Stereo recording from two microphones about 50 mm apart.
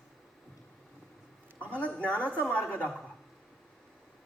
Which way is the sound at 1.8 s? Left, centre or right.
Left.